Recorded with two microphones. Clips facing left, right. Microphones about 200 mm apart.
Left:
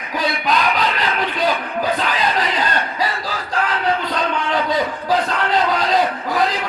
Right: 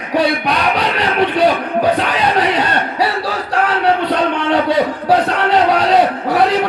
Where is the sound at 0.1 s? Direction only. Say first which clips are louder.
Right 5 dB; 70° right (ahead or behind).